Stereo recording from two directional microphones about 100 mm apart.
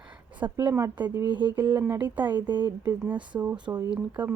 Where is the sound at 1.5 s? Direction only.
20° right (ahead or behind).